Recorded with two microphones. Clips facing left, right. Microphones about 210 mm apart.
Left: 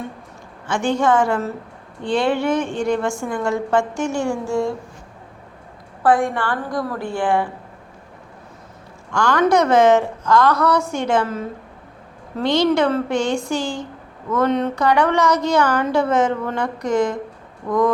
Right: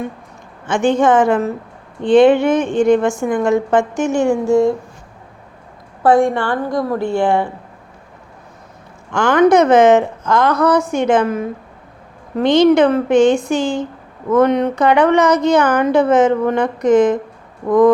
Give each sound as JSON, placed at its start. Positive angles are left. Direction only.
{"t": 0.7, "sound": "a woman's voice", "side_deg": -20}
{"t": 6.0, "sound": "a woman's voice", "side_deg": -25}
{"t": 9.1, "sound": "a woman's voice", "side_deg": -20}